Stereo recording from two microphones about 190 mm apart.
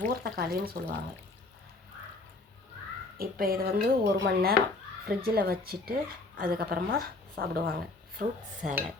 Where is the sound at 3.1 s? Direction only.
50° right (ahead or behind).